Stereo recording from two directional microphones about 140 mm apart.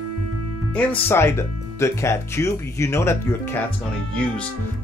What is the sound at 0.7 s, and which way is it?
Speech, 15° left (ahead or behind).